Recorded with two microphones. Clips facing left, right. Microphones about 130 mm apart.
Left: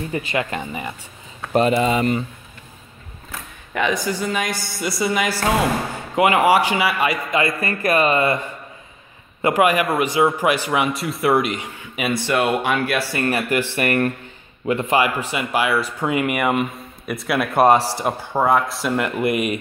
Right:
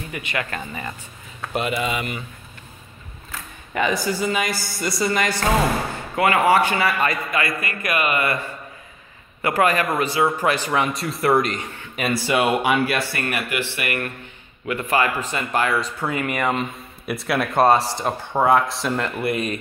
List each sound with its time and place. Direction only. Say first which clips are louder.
0.1 s a man's voice: left 3 dB; 30° left (ahead or behind)
1.5 s speech: left 7 dB; 35° left (ahead or behind)
3.7 s a woman's voice: even; centre (ahead or behind)
7.2 s a man's voice: left 4 dB; 25° left (ahead or behind)
9.4 s a man's voice: left 3 dB; 15° left (ahead or behind)
12.1 s a woman's voice: even; 5° right (ahead or behind)
13.1 s a man's voice: left 5 dB; 25° left (ahead or behind)
13.7 s speech: left 7 dB; 40° left (ahead or behind)
14.7 s a man's voice: left 4 dB; 25° left (ahead or behind)
15.0 s a man's voice: left 2 dB; 10° left (ahead or behind)
17.1 s a woman's voice: left 1 dB; centre (ahead or behind)
17.6 s a man's voice: left 2 dB; 15° left (ahead or behind)
18.9 s a man's voice: left 5 dB; 15° left (ahead or behind)